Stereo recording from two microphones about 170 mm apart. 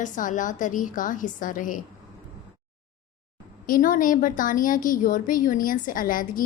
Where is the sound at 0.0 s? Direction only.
50° left (ahead or behind).